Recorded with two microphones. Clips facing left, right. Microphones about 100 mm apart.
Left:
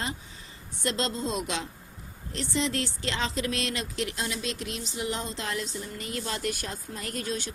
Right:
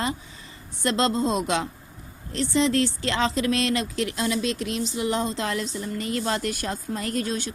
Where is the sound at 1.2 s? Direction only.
30° right (ahead or behind).